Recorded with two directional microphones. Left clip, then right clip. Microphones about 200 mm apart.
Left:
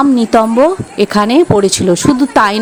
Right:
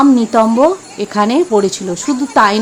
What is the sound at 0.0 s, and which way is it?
Speech, 35° left (ahead or behind).